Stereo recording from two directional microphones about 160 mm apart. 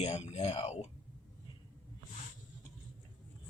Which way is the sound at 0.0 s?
45° left (ahead or behind).